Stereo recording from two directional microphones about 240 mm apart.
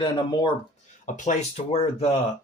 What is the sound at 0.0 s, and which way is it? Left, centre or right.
Speech, centre.